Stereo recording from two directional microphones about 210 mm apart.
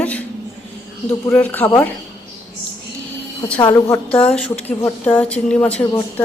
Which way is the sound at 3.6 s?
15° left (ahead or behind).